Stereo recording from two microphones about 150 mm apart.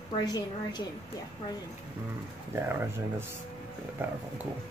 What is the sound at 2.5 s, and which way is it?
Speech, 15° right (ahead or behind).